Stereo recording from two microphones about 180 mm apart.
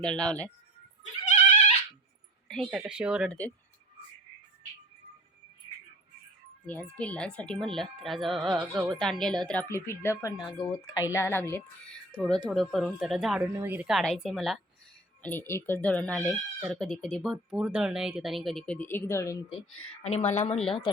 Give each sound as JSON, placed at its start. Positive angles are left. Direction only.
{"t": 0.0, "sound": "speech", "side_deg": 5}
{"t": 1.2, "sound": "goat", "side_deg": 40}
{"t": 2.5, "sound": "speech", "side_deg": 0}
{"t": 6.7, "sound": "speech", "side_deg": 10}
{"t": 20.0, "sound": "a woman's voice", "side_deg": 35}